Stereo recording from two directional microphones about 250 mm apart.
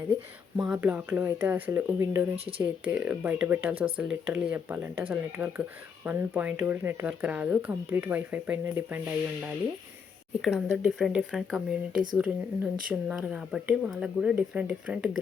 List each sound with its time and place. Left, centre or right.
0.5 s speech: centre
10.4 s speech: centre